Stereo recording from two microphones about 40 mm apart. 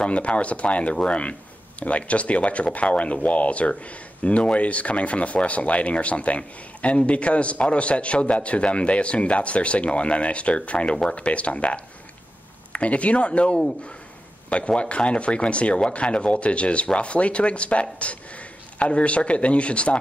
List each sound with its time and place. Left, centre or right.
0.0 s speech: left
14.8 s speech: left